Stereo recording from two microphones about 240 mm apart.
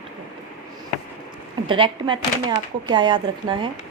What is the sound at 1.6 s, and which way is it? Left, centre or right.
A woman's voice, centre.